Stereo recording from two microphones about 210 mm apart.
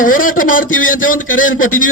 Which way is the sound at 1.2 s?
70° left (ahead or behind).